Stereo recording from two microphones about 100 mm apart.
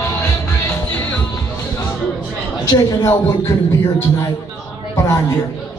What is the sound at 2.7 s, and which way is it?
Speech, 30° left (ahead or behind).